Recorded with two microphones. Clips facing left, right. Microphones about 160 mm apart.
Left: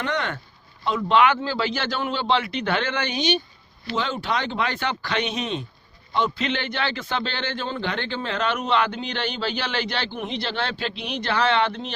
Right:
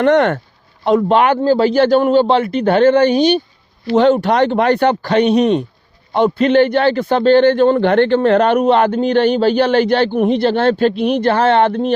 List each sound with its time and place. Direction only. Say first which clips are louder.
0.0 s speech: right 15 dB; 70° right (ahead or behind)
0.9 s a man's voice: right 6 dB; 45° right (ahead or behind)
3.9 s a man's voice: right 14 dB; 65° right (ahead or behind)